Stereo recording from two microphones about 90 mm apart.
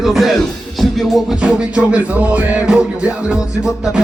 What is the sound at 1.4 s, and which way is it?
Music, 10° right (ahead or behind).